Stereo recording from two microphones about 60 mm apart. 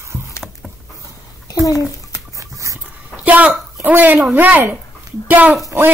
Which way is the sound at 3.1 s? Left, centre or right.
Right.